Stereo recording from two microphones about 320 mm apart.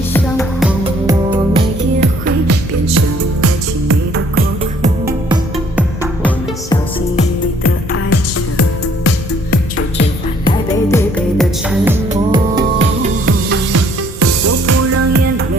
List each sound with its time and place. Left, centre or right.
0.6 s music: centre
1.5 s music: right
2.5 s music: right
5.0 s music: centre
7.9 s music: left
10.4 s music: centre
11.7 s music: centre
12.5 s music: right
13.7 s music: right